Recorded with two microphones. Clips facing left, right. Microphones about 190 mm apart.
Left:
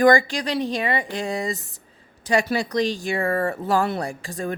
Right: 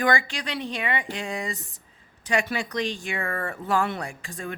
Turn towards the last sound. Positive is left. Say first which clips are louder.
# left 6 dB
turn(degrees=40)  # may be behind; listen again after turning